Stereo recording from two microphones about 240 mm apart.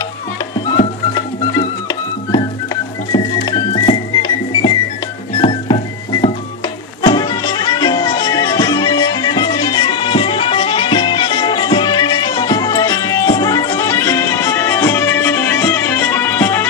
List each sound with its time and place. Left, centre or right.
2.3 s music: centre
7.0 s music: centre